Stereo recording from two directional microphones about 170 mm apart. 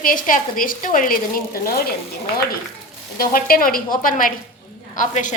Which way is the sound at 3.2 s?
60° left (ahead or behind).